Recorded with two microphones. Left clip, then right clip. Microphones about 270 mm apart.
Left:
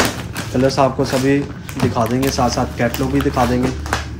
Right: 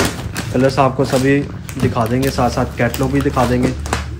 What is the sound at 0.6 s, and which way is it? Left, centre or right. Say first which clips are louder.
Speech: right 1 dB; centre.